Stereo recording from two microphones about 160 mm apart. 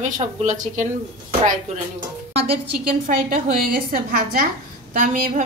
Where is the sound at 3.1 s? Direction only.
65° right (ahead or behind).